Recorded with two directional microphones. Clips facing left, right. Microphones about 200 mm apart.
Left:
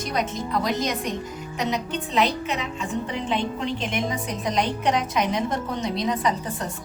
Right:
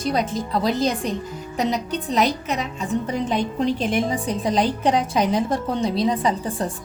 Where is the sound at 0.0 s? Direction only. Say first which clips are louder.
Right 4 dB; 30° right (ahead or behind).